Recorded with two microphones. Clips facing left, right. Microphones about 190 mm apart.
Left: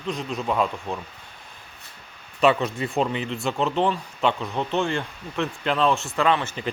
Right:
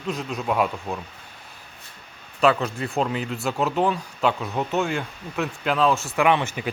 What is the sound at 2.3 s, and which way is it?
Speech, centre (ahead or behind).